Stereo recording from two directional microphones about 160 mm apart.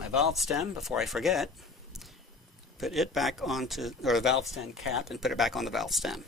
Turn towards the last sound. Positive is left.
turn(degrees=0)  # may be behind; listen again after turning